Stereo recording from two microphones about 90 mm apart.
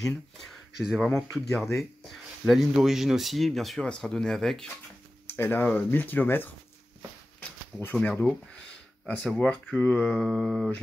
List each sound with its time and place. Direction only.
0.8 s speech: centre (ahead or behind)
5.3 s speech: 20° left (ahead or behind)
7.8 s speech: 15° left (ahead or behind)
9.2 s speech: 10° left (ahead or behind)